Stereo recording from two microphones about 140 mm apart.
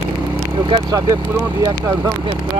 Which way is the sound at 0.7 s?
30° right (ahead or behind).